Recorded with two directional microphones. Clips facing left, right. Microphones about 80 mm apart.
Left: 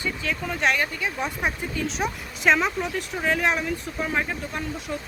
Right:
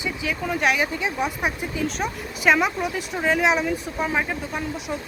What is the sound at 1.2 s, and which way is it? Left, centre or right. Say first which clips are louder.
Speech: right 2 dB; centre.